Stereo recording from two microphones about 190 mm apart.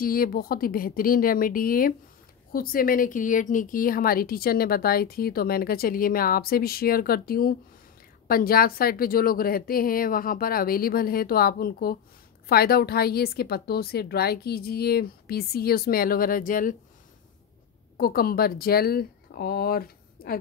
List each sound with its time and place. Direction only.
0.0 s speech: 50° left (ahead or behind)
17.9 s speech: 50° left (ahead or behind)